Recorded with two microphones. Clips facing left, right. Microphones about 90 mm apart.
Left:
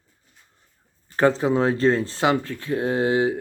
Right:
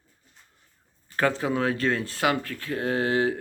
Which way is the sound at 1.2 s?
25° left (ahead or behind).